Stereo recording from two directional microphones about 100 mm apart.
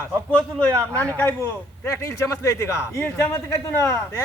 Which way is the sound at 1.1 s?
20° left (ahead or behind).